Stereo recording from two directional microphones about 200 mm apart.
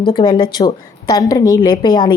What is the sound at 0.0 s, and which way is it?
A woman's voice, 25° left (ahead or behind).